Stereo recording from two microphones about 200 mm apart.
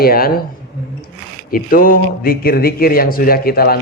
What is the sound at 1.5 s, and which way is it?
A man's voice, 45° left (ahead or behind).